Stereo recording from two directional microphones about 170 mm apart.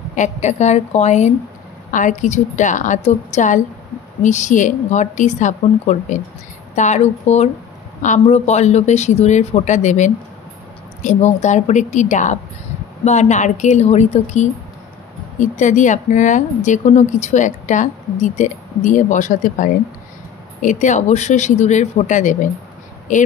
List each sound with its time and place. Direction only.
0.1 s speech: 45° left (ahead or behind)